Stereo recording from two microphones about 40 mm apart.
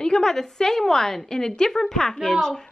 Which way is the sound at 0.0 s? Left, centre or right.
Centre.